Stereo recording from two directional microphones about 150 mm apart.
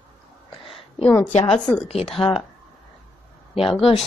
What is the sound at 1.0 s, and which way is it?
Speech, 10° left (ahead or behind).